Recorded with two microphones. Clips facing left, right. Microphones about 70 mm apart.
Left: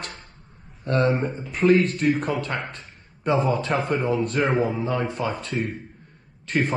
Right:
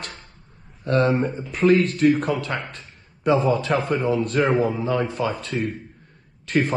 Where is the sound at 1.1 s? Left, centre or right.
Centre.